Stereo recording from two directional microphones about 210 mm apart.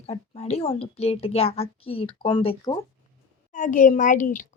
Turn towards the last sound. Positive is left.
turn(degrees=40)  # may be behind; listen again after turning